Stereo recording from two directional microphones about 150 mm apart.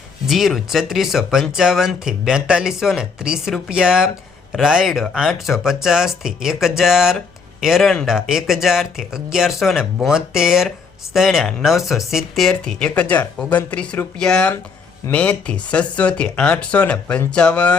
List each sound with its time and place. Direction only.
0.3 s speech: centre (ahead or behind)